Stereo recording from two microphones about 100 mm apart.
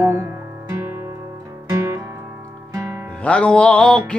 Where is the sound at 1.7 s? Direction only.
30° right (ahead or behind).